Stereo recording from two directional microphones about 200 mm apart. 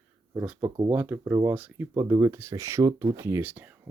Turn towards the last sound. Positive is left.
turn(degrees=-10)  # may be behind; listen again after turning